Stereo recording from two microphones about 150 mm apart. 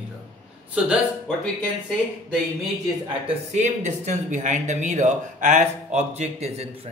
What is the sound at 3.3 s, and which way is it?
Speech, 50° right (ahead or behind).